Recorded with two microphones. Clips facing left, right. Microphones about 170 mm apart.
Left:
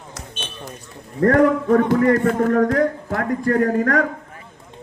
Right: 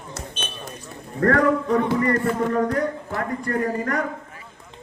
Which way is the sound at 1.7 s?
55° left (ahead or behind).